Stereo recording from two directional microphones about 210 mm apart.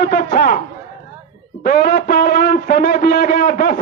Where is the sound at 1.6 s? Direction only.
45° left (ahead or behind).